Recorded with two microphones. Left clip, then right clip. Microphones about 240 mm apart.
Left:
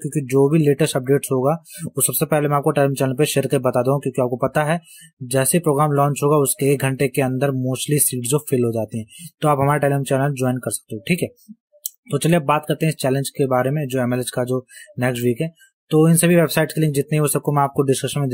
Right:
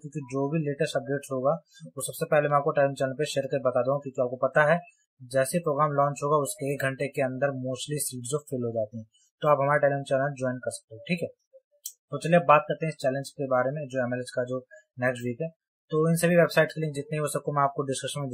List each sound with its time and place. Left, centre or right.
0.1 s speech: left
11.8 s speech: left